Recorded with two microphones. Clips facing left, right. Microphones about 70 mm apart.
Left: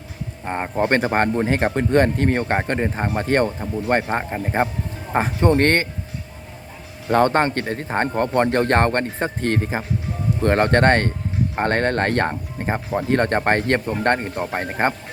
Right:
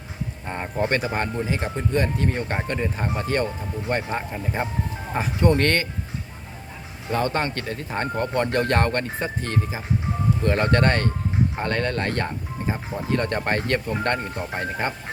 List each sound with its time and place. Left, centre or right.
0.4 s speech: left
2.4 s speech: left
7.1 s speech: left